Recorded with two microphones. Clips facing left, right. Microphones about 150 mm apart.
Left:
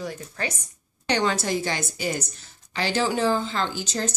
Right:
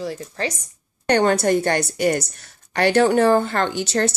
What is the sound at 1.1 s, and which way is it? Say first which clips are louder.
A woman's voice: right 7 dB; 55° right (ahead or behind).